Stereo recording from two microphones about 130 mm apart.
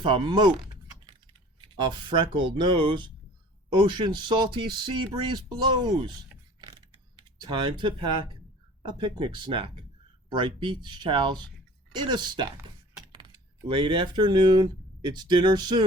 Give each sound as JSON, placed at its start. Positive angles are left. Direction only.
{"t": 0.0, "sound": "speech", "side_deg": -40}
{"t": 2.0, "sound": "speech", "side_deg": -40}
{"t": 6.6, "sound": "mechanisms", "side_deg": -35}
{"t": 8.8, "sound": "speech", "side_deg": -35}